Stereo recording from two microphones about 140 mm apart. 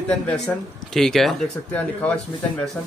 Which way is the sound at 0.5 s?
10° left (ahead or behind).